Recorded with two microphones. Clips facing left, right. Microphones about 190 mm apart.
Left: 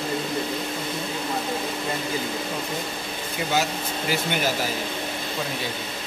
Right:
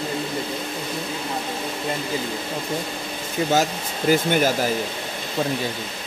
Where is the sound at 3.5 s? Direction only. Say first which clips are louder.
Right 3 dB; 45° right (ahead or behind).